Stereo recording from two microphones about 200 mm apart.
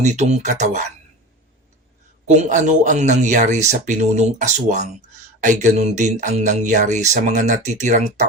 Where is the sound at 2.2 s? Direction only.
40° right (ahead or behind).